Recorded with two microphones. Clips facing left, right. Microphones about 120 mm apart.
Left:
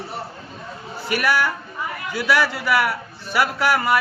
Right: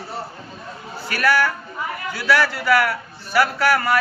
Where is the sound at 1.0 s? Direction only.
15° left (ahead or behind).